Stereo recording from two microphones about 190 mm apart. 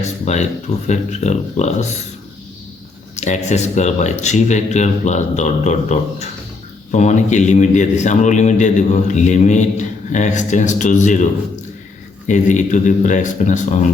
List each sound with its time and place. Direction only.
0.0 s a man's voice: 35° left (ahead or behind)
3.2 s a man's voice: 40° left (ahead or behind)
12.3 s a man's voice: 40° left (ahead or behind)